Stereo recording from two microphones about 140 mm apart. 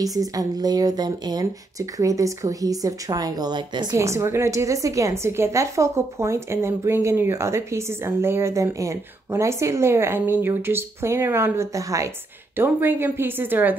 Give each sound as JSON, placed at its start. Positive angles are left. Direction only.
{"t": 0.0, "sound": "a woman's voice", "side_deg": -25}